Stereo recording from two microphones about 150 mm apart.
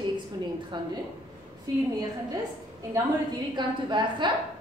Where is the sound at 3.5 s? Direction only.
30° right (ahead or behind).